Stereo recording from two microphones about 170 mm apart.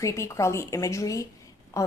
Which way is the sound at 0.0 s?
15° left (ahead or behind).